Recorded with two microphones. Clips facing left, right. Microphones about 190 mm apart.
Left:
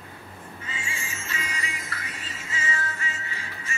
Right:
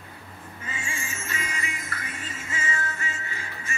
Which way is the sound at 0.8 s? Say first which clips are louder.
Right 2 dB; 50° right (ahead or behind).